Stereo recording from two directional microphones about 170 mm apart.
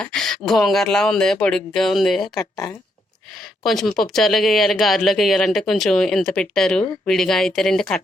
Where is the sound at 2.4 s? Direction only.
15° left (ahead or behind).